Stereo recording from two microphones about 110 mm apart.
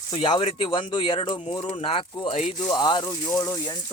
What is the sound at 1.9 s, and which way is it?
Speech, 60° left (ahead or behind).